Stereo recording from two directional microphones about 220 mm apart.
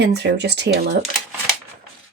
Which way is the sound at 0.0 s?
50° right (ahead or behind).